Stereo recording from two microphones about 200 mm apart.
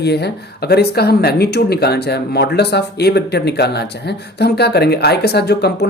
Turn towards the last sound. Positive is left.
turn(degrees=55)  # may be behind; listen again after turning